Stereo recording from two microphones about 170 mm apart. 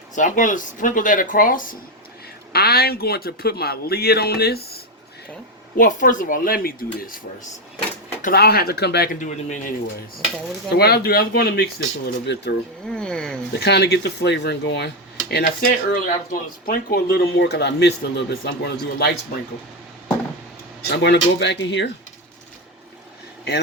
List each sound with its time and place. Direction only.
0.2 s speech: 50° left (ahead or behind)
2.5 s speech: 65° left (ahead or behind)
5.7 s speech: 50° left (ahead or behind)
8.2 s speech: 65° left (ahead or behind)
9.2 s speech: 50° left (ahead or behind)
10.8 s speech: 70° left (ahead or behind)
12.8 s speech: 5° left (ahead or behind)
13.6 s speech: 75° left (ahead or behind)
15.3 s speech: 65° left (ahead or behind); by 19.1 s 80° left
20.9 s speech: 90° left